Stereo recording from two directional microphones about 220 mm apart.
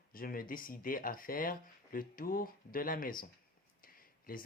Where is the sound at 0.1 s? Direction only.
40° left (ahead or behind).